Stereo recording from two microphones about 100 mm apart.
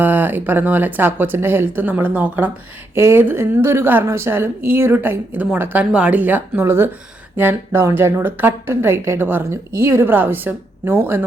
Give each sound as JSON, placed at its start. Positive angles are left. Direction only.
{"t": 0.0, "sound": "speech", "side_deg": -20}
{"t": 2.9, "sound": "a woman's voice", "side_deg": -25}